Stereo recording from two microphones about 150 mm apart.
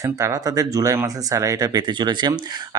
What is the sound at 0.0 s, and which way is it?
Speech, 20° right (ahead or behind).